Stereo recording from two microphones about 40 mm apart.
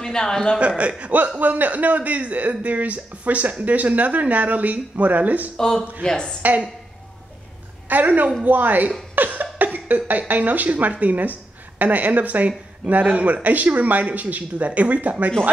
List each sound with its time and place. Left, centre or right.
0.0 s speech: centre
0.6 s speech: right
1.4 s speech: right
5.6 s speech: centre
6.4 s speech: right
7.9 s speech: right
9.1 s cough: right
9.8 s speech: right